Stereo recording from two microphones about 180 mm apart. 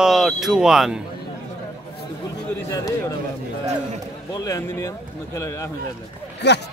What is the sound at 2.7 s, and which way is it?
Speech, 20° left (ahead or behind).